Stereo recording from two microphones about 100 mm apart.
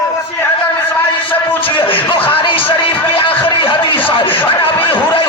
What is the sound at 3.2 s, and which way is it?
Music, 65° left (ahead or behind).